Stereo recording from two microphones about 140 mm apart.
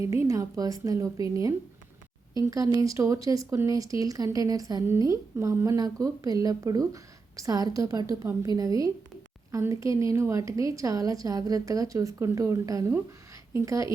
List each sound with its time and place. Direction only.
0.0 s speech: 20° right (ahead or behind)